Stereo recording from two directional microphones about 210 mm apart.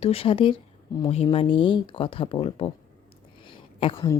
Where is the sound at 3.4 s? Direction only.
25° left (ahead or behind).